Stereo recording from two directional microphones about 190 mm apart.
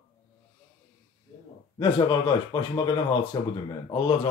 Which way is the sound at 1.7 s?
25° left (ahead or behind).